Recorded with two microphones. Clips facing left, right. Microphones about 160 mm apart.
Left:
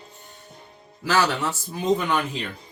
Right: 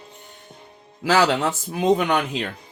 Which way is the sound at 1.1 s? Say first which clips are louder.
Right 3 dB; 85° right.